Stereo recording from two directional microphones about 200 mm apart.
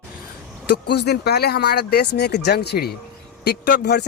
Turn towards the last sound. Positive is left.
turn(degrees=55)  # may be behind; listen again after turning